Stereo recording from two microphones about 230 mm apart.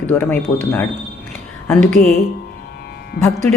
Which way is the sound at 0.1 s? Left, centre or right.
Centre.